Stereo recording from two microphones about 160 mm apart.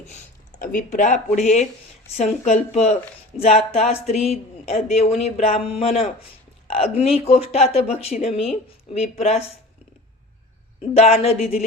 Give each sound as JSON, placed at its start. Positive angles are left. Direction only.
{"t": 0.6, "sound": "speech", "side_deg": 55}
{"t": 10.9, "sound": "speech", "side_deg": 40}